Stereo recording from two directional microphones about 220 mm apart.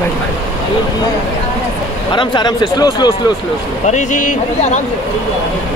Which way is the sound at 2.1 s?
20° left (ahead or behind).